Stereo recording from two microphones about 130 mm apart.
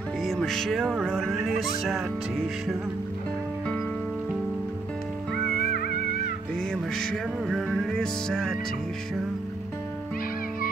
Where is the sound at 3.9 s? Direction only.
10° left (ahead or behind).